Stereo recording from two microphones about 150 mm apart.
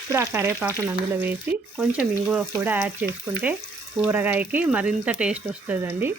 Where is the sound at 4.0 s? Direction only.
10° right (ahead or behind).